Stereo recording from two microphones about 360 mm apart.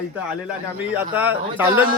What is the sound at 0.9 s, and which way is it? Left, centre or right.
Speech, centre.